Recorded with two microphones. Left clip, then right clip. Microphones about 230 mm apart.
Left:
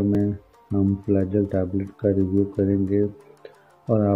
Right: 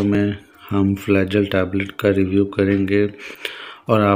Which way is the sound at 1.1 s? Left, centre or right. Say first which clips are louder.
Right 6 dB; centre.